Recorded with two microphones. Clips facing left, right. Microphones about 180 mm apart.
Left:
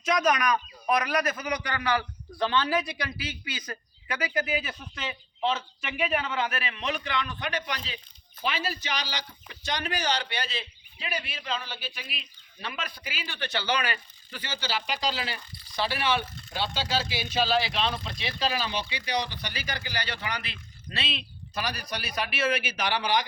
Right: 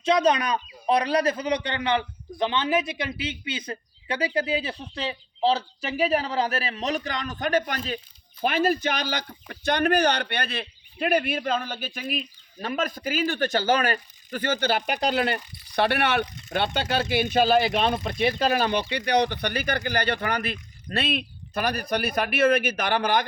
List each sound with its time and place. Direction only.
0.0 s a man's voice: 30° right (ahead or behind); by 16.2 s 65° right (ahead or behind)
16.2 s speech: 20° right (ahead or behind)
16.5 s speech: 60° right (ahead or behind)